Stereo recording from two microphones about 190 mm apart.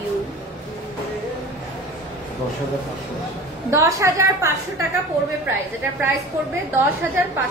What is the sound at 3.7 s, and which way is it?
Speech, 15° right (ahead or behind).